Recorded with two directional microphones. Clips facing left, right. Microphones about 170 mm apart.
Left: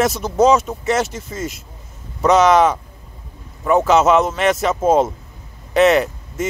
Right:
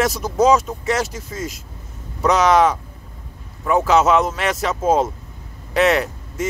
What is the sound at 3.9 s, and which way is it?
Speech, 5° left (ahead or behind).